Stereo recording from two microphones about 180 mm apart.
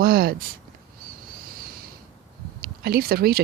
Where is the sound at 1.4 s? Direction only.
55° right (ahead or behind).